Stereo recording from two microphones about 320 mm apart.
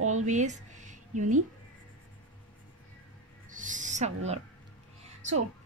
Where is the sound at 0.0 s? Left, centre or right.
Right.